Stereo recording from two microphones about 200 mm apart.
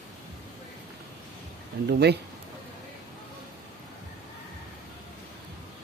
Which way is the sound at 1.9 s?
55° right (ahead or behind).